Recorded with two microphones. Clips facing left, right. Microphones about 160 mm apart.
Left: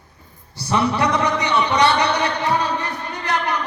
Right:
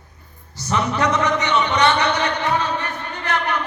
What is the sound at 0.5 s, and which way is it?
A man's voice, 30° left (ahead or behind).